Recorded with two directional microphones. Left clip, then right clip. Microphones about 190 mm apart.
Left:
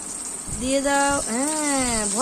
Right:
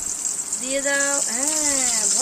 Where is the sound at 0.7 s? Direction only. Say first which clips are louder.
Left 2 dB; 30° left (ahead or behind).